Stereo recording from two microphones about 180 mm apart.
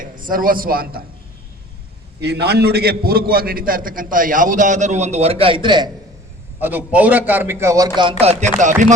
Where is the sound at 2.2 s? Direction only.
65° right (ahead or behind); by 5.9 s 25° right (ahead or behind).